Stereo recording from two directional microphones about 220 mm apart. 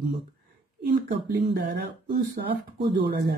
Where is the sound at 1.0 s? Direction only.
40° right (ahead or behind).